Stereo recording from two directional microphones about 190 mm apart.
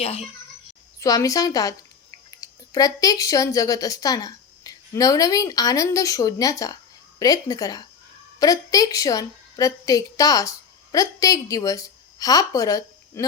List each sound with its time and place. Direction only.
0.0 s a child's voice: 30° left (ahead or behind)
0.9 s a woman's voice: 20° left (ahead or behind)